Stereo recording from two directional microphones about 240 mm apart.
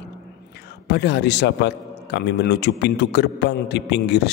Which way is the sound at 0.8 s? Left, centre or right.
Left.